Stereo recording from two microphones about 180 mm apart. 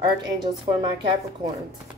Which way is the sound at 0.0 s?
25° right (ahead or behind).